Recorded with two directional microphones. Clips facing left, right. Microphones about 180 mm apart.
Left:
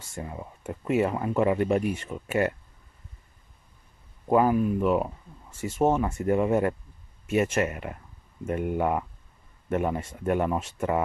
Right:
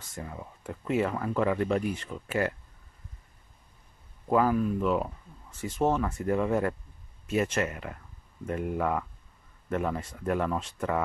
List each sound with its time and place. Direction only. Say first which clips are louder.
0.1 s speech: left 3 dB; 30° left (ahead or behind)
4.3 s speech: left 3 dB; 25° left (ahead or behind)